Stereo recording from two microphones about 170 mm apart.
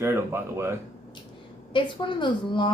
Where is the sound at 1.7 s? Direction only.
30° left (ahead or behind).